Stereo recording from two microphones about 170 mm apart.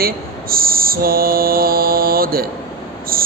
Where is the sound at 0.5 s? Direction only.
60° right (ahead or behind).